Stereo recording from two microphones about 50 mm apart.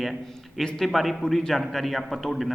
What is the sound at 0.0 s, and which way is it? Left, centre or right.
A man's voice, centre.